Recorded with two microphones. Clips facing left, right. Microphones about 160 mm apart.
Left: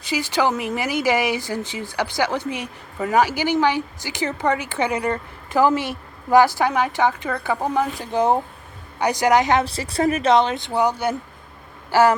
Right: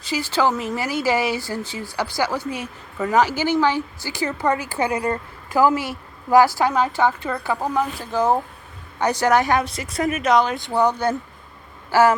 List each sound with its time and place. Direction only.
0.0 s a woman's voice: 15° left (ahead or behind)
10.8 s speech: 10° left (ahead or behind)